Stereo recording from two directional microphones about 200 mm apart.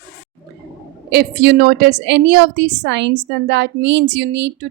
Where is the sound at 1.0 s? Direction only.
55° right (ahead or behind).